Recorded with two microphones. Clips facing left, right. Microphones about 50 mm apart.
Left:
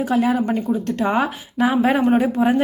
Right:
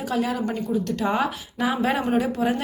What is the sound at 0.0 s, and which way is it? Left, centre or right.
A woman's voice, centre.